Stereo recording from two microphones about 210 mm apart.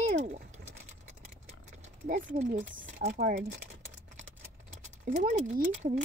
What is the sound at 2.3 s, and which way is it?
Speech, 35° right (ahead or behind).